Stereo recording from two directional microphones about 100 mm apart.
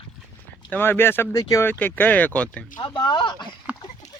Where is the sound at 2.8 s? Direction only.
50° left (ahead or behind).